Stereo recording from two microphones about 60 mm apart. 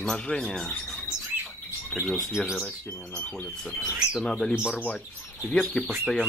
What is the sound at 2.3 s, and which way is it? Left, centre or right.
Speech, centre.